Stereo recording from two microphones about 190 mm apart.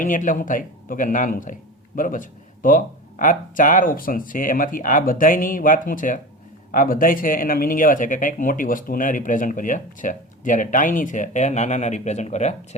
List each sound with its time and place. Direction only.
0.0 s speech: 45° left (ahead or behind)